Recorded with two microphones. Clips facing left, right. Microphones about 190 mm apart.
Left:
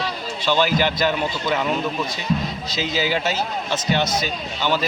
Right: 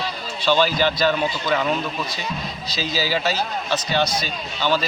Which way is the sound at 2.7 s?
20° left (ahead or behind).